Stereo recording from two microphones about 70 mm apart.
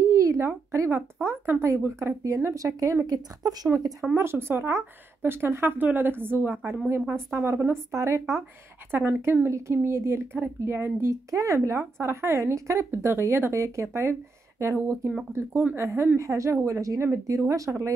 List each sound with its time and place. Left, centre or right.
0.0 s a sound: right
0.7 s speech: right
4.1 s speech: right
7.9 s speech: right
8.9 s speech: right